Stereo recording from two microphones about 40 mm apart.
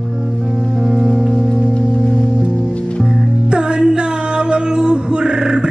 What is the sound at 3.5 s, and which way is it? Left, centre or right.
Music, right.